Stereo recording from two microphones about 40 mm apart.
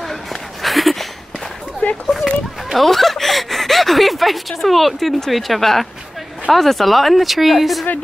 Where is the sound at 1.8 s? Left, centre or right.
Left.